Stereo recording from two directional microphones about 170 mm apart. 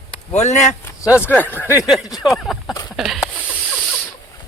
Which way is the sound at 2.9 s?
Centre (ahead or behind).